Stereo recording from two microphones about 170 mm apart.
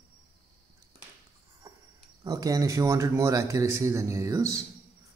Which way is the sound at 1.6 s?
25° right (ahead or behind).